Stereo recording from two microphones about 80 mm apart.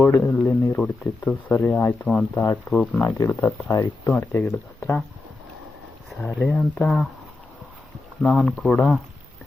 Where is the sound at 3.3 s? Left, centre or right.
Left.